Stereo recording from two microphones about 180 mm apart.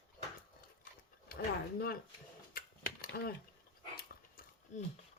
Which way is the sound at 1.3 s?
55° left (ahead or behind).